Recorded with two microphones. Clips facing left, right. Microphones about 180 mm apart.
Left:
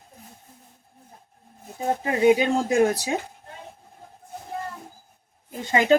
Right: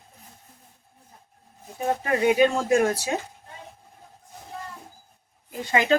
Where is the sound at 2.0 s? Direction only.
20° left (ahead or behind).